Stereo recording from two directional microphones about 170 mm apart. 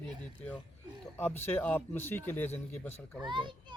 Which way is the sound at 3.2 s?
25° right (ahead or behind).